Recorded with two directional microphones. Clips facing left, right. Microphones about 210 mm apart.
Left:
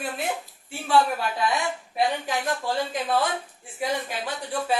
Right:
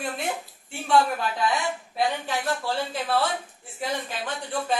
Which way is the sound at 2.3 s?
15° left (ahead or behind).